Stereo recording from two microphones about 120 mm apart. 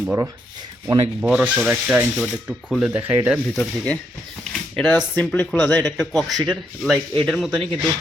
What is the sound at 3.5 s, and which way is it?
Speech, 10° left (ahead or behind).